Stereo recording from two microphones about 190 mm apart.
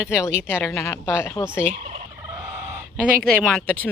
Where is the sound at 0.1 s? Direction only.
15° left (ahead or behind).